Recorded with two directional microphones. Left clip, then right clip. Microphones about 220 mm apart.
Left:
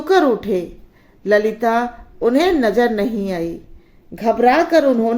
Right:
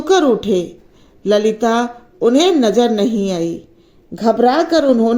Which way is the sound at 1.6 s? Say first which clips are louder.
Right 1 dB; 20° right (ahead or behind).